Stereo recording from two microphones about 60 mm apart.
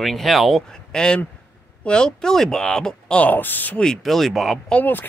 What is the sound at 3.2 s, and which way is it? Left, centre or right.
Speech, left.